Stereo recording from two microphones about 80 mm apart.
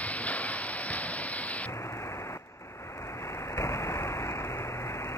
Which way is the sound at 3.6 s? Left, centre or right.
Left.